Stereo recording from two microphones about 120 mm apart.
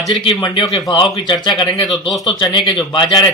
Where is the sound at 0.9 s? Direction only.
45° left (ahead or behind).